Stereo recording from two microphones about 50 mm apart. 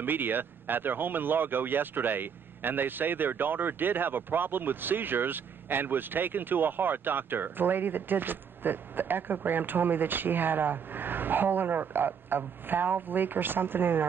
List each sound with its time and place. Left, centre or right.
0.0 s speech: right